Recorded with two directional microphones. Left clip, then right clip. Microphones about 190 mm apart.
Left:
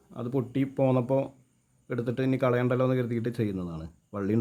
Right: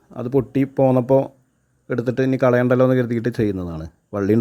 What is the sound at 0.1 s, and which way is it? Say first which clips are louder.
Speech: right 11 dB; 35° right (ahead or behind).